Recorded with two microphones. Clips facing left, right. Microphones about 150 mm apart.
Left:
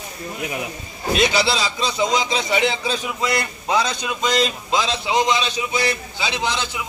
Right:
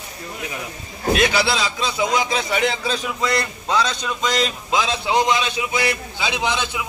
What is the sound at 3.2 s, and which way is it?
A man's voice, 15° left (ahead or behind).